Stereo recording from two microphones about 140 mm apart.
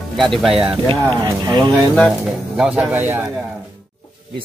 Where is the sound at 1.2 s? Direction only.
30° right (ahead or behind).